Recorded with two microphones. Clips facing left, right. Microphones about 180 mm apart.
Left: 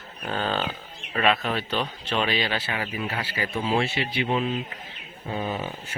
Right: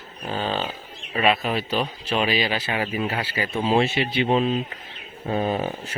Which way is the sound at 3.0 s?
35° right (ahead or behind).